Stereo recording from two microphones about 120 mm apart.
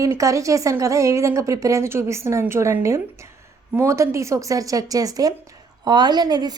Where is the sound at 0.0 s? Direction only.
25° right (ahead or behind).